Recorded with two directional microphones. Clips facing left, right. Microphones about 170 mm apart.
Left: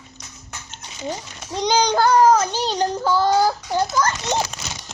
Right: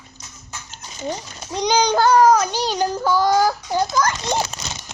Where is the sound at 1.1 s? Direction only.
20° right (ahead or behind).